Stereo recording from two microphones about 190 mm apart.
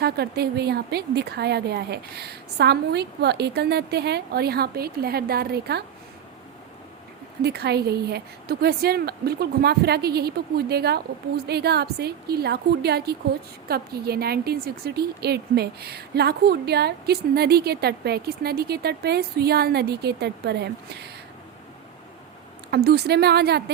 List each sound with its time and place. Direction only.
0.0 s a woman's voice: 60° right (ahead or behind)
7.4 s a woman's voice: 60° right (ahead or behind)
22.7 s a woman's voice: 55° right (ahead or behind)